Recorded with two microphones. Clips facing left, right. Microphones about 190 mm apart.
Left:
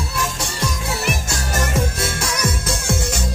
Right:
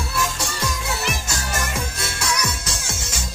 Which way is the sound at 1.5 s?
45° left (ahead or behind).